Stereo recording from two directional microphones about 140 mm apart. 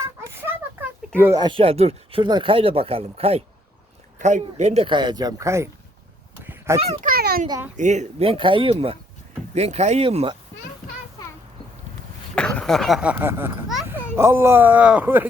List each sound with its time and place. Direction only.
0.3 s a sound: 15° right (ahead or behind)
1.4 s speech: 35° right (ahead or behind)
2.2 s speech: 35° right (ahead or behind)
4.2 s speech: 60° right (ahead or behind)
4.9 s speech: 30° right (ahead or behind)
6.4 s honk: 15° right (ahead or behind)
7.0 s a sound: 90° right
7.8 s speech: 55° right (ahead or behind)
12.3 s speech: 5° left (ahead or behind); by 15.3 s 15° right (ahead or behind)